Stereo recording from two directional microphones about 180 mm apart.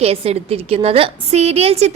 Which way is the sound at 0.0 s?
35° right (ahead or behind).